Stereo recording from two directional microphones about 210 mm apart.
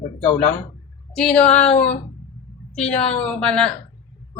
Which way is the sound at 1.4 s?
30° left (ahead or behind).